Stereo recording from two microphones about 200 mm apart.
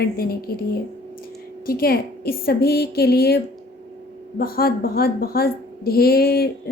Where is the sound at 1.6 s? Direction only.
50° left (ahead or behind).